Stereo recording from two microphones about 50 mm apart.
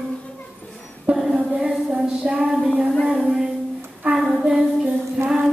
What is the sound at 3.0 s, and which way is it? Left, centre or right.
Music, centre.